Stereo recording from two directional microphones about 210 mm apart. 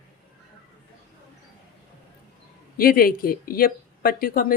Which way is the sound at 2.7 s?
45° left (ahead or behind).